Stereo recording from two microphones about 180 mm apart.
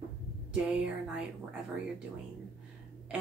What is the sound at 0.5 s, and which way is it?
Speech, 5° right (ahead or behind).